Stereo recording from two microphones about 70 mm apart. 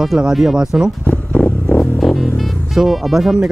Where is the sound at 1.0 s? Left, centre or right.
Left.